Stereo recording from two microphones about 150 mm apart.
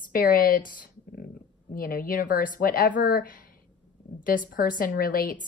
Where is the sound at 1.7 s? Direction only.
70° left (ahead or behind).